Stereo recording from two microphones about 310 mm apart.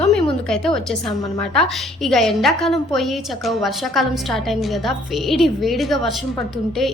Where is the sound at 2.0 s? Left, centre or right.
Centre.